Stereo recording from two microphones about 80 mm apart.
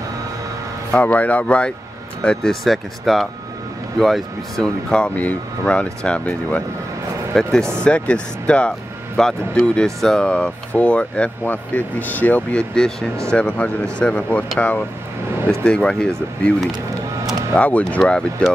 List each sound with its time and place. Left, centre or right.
0.9 s a man's voice: left
2.2 s speech: centre
12.7 s a man's voice: centre
17.6 s speech: centre